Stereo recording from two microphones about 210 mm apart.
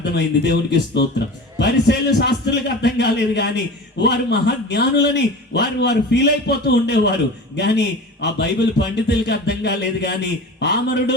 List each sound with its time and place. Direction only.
0.0 s a man's voice: 55° left (ahead or behind)